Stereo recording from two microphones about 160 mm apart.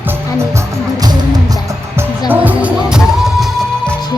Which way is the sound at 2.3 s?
10° right (ahead or behind).